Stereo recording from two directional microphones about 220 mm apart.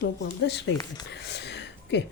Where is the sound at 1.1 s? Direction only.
50° left (ahead or behind).